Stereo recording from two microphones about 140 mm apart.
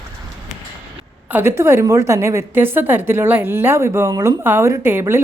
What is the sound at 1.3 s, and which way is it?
A woman's voice, 15° right (ahead or behind).